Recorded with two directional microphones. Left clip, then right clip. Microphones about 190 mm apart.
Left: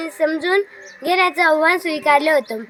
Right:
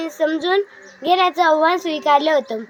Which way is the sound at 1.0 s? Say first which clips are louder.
Even; 15° right (ahead or behind).